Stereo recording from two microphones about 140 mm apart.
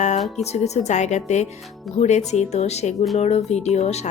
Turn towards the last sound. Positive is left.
turn(degrees=50)  # may be behind; listen again after turning